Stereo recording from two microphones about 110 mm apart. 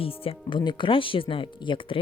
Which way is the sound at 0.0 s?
60° left (ahead or behind).